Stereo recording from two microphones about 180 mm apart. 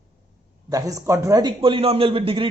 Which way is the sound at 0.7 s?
20° right (ahead or behind).